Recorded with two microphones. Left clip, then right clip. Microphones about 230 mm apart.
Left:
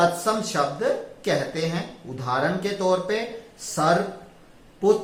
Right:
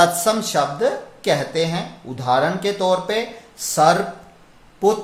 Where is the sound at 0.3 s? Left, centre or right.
Right.